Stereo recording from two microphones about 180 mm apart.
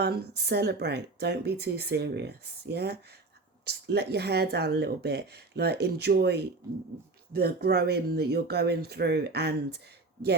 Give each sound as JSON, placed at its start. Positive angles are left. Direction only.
{"t": 0.0, "sound": "speech", "side_deg": -65}